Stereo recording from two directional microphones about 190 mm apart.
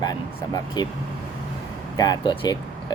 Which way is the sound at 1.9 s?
20° left (ahead or behind).